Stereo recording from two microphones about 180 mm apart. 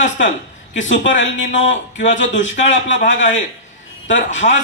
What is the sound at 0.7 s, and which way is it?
Speech, 90° left.